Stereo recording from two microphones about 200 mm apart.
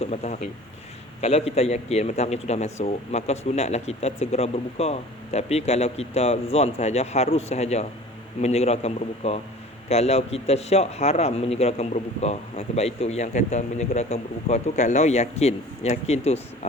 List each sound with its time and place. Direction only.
0.0 s a man's voice: 30° left (ahead or behind)